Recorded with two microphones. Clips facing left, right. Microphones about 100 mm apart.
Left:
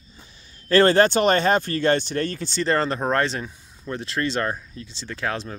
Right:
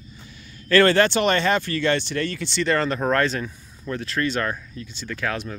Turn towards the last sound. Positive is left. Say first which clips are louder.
# even
turn(degrees=30)  # may be behind; listen again after turning